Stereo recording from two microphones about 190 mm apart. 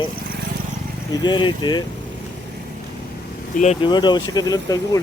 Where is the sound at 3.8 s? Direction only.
25° left (ahead or behind).